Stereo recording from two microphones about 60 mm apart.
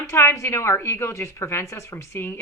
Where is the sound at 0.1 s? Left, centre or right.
Left.